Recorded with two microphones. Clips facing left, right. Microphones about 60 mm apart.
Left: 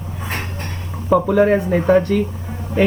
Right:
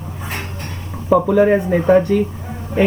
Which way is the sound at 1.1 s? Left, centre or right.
Centre.